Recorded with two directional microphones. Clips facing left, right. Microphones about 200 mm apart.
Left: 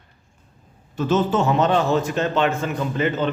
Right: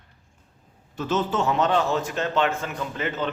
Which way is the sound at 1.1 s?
40° left (ahead or behind).